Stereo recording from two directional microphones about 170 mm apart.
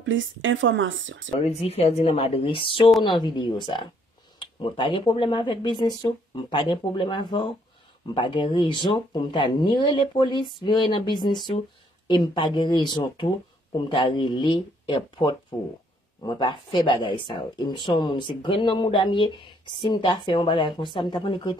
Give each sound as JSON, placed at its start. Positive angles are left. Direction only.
{"t": 0.0, "sound": "speech", "side_deg": -90}
{"t": 1.4, "sound": "speech", "side_deg": 35}